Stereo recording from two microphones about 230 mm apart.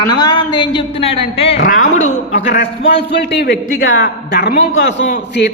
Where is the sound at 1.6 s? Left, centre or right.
Left.